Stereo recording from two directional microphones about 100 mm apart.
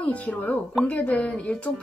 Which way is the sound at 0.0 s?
15° left (ahead or behind).